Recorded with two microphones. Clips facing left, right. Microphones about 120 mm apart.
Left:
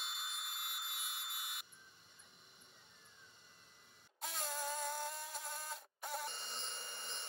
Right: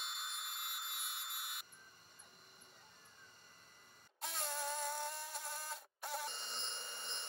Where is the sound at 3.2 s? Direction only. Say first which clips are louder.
Right 1 dB; 45° right (ahead or behind).